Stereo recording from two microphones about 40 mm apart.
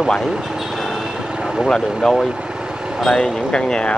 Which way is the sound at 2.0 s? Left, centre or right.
Centre.